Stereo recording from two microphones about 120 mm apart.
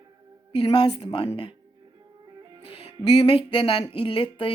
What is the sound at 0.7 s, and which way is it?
Speech, 40° left (ahead or behind).